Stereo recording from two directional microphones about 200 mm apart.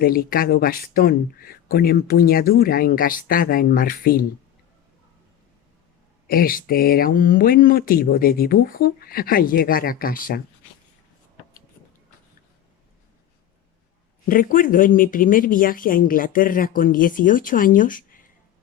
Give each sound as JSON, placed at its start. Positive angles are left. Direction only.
{"t": 0.0, "sound": "speech", "side_deg": 45}
{"t": 6.2, "sound": "speech", "side_deg": 45}
{"t": 14.3, "sound": "speech", "side_deg": 45}